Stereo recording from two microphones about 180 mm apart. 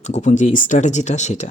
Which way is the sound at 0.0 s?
40° left (ahead or behind).